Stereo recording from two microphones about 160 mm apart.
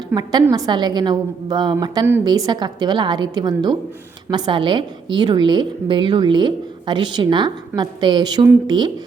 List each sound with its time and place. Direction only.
0.1 s a woman's voice: 25° right (ahead or behind)